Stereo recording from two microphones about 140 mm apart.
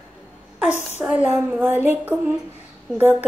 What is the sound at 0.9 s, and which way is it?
Speech, 10° right (ahead or behind).